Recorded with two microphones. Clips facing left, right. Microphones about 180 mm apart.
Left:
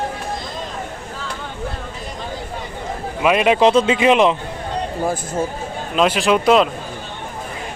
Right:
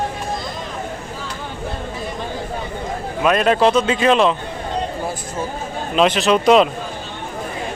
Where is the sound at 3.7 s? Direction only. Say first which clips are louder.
Left 2 dB; 30° left (ahead or behind).